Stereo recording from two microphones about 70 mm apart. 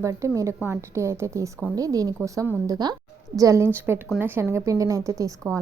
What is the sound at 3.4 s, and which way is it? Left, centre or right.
Speech, right.